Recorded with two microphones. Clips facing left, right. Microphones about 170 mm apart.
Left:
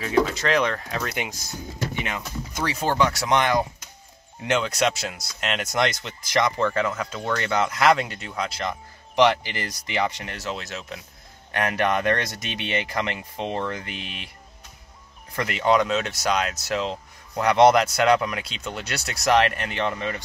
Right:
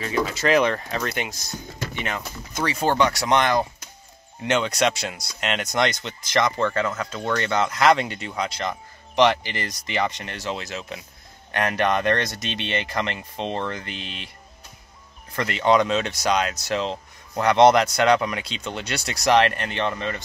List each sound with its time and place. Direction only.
0.0 s speech: 5° right (ahead or behind)
1.0 s speech: 10° left (ahead or behind)
15.3 s speech: 10° left (ahead or behind)